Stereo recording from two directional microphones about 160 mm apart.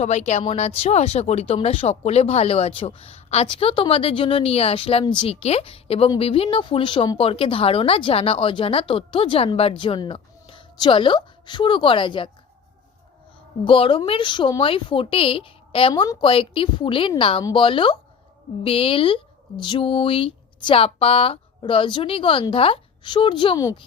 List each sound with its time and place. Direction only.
0.0 s a woman's voice: 45° left (ahead or behind)
13.7 s a woman's voice: 35° left (ahead or behind)